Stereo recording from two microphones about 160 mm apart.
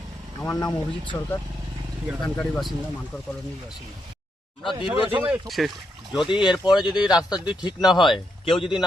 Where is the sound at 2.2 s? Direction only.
5° left (ahead or behind).